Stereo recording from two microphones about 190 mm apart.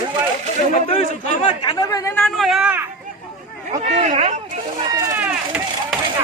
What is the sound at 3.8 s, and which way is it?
Speech, 35° right (ahead or behind).